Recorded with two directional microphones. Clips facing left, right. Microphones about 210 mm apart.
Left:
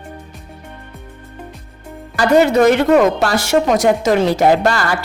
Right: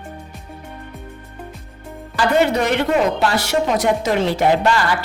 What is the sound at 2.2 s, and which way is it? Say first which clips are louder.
A woman's voice: left 5 dB; 45° left (ahead or behind).